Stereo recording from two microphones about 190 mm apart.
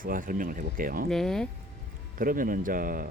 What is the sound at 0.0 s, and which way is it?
Speech, 45° right (ahead or behind).